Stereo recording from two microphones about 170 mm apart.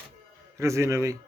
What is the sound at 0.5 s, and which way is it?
Speech, 15° right (ahead or behind).